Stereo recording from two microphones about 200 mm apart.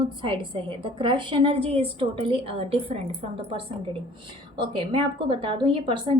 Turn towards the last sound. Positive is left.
turn(degrees=-25)  # may be behind; listen again after turning